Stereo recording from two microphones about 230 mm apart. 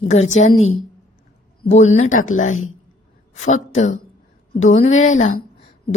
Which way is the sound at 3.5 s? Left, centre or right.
Left.